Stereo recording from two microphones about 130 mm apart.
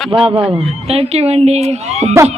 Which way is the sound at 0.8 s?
50° right (ahead or behind).